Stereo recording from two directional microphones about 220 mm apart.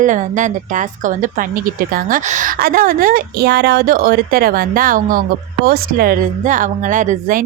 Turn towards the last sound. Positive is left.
turn(degrees=-35)  # may be behind; listen again after turning